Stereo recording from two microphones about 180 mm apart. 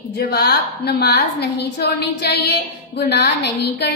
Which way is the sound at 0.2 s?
65° left (ahead or behind).